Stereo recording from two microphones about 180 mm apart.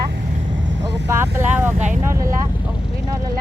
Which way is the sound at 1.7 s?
40° right (ahead or behind).